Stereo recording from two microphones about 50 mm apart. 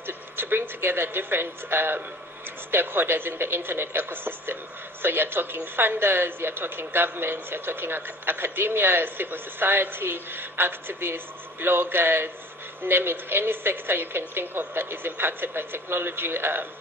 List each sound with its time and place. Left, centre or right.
0.0 s a woman's voice: right